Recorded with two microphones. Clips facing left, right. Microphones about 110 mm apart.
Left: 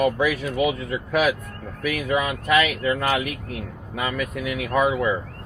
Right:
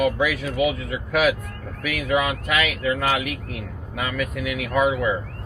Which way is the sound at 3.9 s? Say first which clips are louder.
Even; 30° left (ahead or behind).